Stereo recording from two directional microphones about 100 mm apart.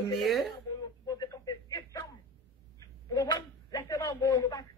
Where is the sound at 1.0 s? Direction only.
40° left (ahead or behind).